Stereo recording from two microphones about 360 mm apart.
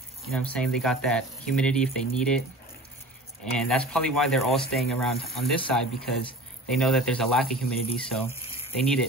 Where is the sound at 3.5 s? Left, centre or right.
Centre.